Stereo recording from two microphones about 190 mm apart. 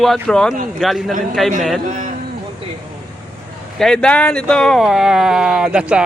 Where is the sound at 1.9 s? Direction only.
40° right (ahead or behind).